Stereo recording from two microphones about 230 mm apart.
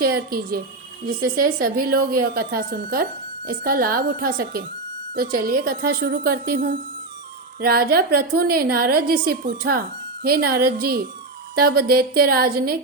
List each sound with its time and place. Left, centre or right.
0.0 s a woman's voice: right